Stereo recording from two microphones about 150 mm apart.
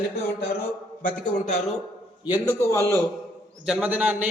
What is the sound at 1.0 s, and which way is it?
Speech, 60° left (ahead or behind).